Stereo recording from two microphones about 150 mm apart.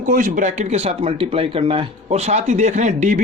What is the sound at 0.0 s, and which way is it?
A man's voice, 60° right (ahead or behind).